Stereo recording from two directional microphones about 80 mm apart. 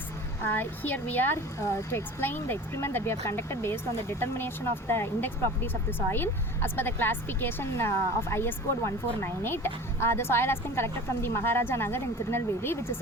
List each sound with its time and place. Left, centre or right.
0.4 s speech: left
1.5 s speech: left